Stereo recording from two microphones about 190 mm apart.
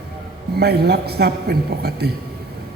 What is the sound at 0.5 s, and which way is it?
A man's voice, 55° right (ahead or behind).